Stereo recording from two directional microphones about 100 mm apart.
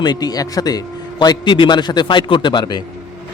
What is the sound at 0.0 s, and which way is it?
A man's voice, 45° left (ahead or behind).